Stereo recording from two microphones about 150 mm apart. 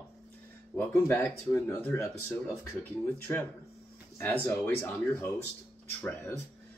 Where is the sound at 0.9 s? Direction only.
10° left (ahead or behind).